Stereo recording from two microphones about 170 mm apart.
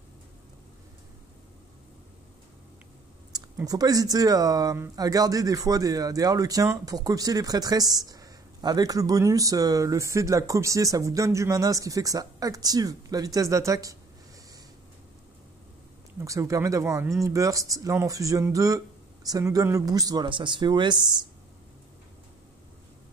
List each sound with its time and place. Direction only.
3.3 s speech: 20° right (ahead or behind)
16.2 s speech: 20° right (ahead or behind)